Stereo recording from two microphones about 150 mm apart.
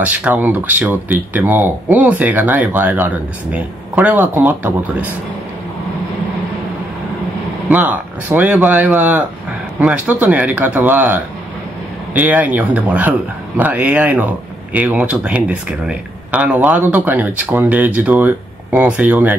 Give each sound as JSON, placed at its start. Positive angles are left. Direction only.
{"t": 0.0, "sound": "speech", "side_deg": -10}
{"t": 7.7, "sound": "speech", "side_deg": -10}